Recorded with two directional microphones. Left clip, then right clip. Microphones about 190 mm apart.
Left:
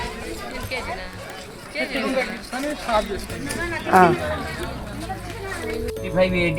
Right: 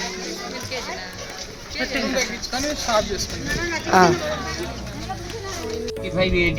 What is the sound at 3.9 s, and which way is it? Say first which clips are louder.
Speech: left 1 dB; centre (ahead or behind).